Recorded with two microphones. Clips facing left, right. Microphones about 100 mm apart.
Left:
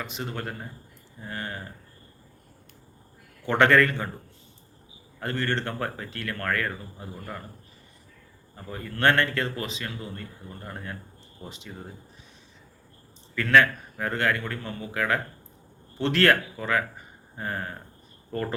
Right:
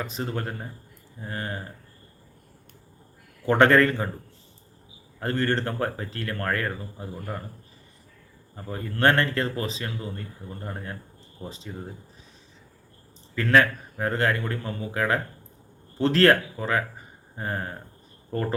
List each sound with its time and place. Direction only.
0.0 s speech: 35° right (ahead or behind)
3.4 s speech: 35° right (ahead or behind)
5.2 s speech: 35° right (ahead or behind)
8.5 s speech: 30° right (ahead or behind)
13.3 s speech: 30° right (ahead or behind)